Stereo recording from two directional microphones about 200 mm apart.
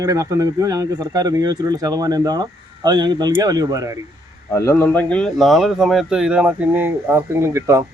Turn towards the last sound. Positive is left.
turn(degrees=-15)  # may be behind; listen again after turning